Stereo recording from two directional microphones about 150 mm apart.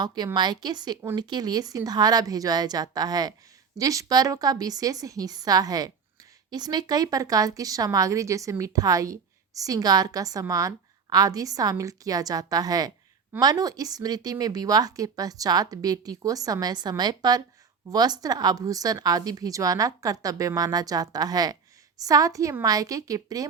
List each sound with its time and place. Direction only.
0.0 s speech: 25° right (ahead or behind)